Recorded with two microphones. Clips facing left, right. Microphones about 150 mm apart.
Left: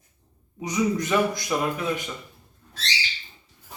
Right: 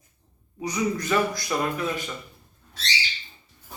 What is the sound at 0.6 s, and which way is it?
Speech, 20° left (ahead or behind).